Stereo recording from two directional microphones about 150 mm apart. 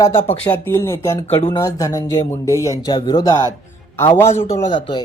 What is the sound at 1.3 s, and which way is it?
Speech, 40° left (ahead or behind).